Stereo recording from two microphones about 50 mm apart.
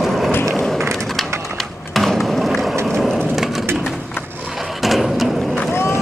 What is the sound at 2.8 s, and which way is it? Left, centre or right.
Wood, centre.